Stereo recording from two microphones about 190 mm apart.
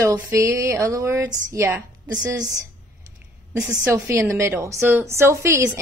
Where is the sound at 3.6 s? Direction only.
5° right (ahead or behind).